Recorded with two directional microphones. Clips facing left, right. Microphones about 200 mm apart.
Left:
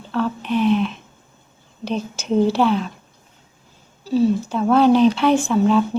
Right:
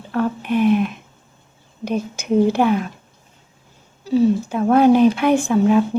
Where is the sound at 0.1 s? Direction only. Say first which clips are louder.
Right 1 dB; 50° right (ahead or behind).